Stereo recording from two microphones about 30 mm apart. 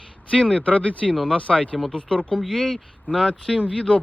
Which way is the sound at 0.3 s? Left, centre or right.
Left.